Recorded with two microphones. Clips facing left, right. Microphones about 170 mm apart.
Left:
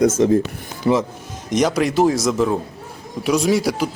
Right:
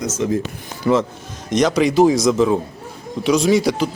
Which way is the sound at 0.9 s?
30° left (ahead or behind).